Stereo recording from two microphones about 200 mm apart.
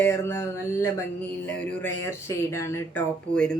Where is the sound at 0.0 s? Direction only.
10° left (ahead or behind).